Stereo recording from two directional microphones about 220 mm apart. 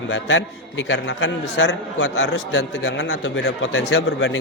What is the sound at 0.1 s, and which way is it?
A man's voice, 60° left (ahead or behind).